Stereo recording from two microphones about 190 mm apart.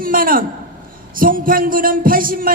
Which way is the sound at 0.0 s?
50° right (ahead or behind).